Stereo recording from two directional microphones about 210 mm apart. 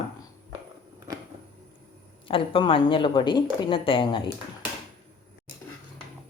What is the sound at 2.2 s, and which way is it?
Speech, 25° left (ahead or behind).